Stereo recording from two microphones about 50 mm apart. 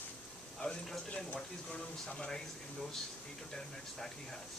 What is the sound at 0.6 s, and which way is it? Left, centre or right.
Speech, left.